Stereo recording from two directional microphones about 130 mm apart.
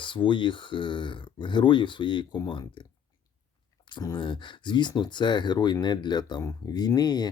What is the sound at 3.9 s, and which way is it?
Speech, 35° left (ahead or behind).